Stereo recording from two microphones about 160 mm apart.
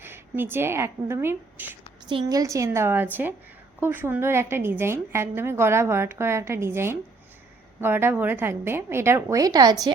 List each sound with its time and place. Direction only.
0.0 s speech: 15° right (ahead or behind)
2.0 s a woman's voice: 25° right (ahead or behind)